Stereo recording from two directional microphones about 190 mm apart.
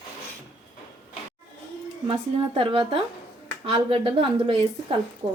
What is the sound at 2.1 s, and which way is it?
Speech, 30° right (ahead or behind).